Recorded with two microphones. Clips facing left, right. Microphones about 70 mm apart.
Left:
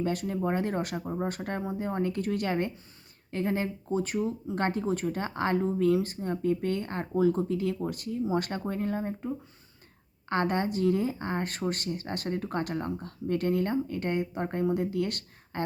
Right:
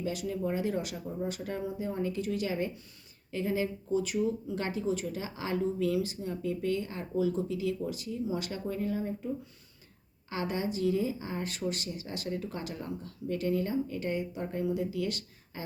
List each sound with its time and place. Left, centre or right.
0.0 s speech: left